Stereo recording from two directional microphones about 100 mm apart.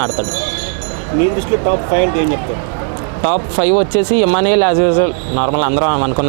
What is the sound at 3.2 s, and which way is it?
Speech, 15° right (ahead or behind).